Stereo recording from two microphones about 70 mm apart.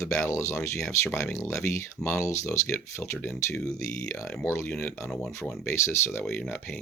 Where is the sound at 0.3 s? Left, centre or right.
Left.